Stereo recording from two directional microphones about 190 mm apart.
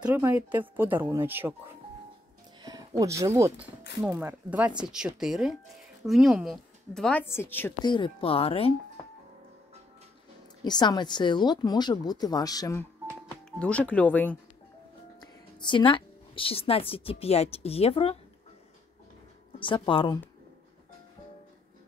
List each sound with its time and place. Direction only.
0.0 s speech: 10° right (ahead or behind)
2.6 s a woman's voice: 20° right (ahead or behind); by 7.7 s 10° left (ahead or behind)
7.8 s a woman's voice: 25° left (ahead or behind)
10.6 s a woman's voice: 20° left (ahead or behind)
13.5 s speech: 5° left (ahead or behind)
15.1 s speech: 25° left (ahead or behind)
19.6 s a woman's voice: 25° left (ahead or behind)